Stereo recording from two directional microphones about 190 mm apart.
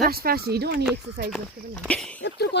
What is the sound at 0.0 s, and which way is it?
Speech, 50° right (ahead or behind).